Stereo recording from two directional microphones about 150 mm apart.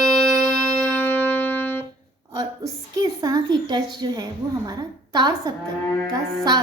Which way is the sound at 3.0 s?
25° right (ahead or behind).